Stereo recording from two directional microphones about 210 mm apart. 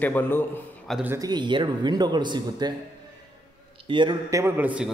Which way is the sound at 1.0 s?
15° right (ahead or behind).